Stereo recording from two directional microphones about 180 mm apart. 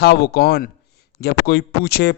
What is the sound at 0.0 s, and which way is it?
Speech, 60° left (ahead or behind).